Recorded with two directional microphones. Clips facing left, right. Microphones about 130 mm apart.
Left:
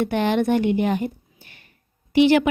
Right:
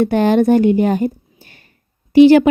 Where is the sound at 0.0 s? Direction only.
40° right (ahead or behind).